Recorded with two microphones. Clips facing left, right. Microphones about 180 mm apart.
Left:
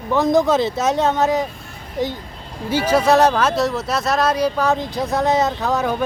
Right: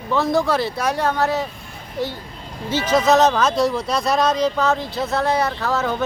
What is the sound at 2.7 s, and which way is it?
Speech, 10° left (ahead or behind).